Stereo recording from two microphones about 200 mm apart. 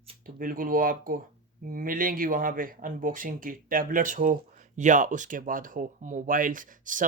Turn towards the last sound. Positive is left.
turn(degrees=-40)  # may be behind; listen again after turning